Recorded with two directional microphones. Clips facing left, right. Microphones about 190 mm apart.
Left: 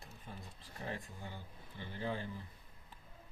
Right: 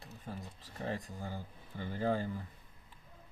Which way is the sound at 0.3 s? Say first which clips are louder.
Right 7 dB; 40° right (ahead or behind).